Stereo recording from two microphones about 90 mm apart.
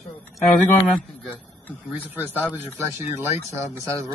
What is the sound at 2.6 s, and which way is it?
Speech, 25° right (ahead or behind).